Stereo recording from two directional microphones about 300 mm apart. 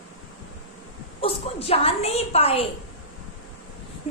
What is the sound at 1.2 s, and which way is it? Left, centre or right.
Speech, centre.